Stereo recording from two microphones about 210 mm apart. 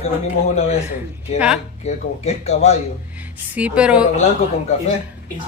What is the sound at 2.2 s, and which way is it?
Speech, 30° left (ahead or behind).